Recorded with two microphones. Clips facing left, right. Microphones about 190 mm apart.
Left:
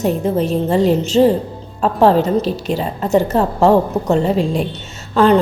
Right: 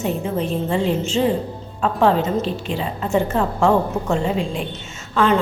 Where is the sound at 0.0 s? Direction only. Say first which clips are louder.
Left 6 dB; 40° left (ahead or behind).